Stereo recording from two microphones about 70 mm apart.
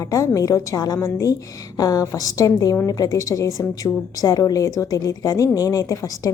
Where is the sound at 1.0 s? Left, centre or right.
Left.